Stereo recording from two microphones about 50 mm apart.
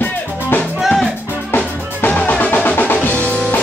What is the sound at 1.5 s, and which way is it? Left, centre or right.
Drum, left.